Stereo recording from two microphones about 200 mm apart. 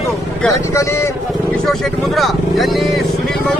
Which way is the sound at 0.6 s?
15° left (ahead or behind).